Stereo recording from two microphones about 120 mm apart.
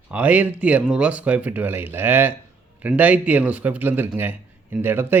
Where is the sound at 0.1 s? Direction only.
15° right (ahead or behind).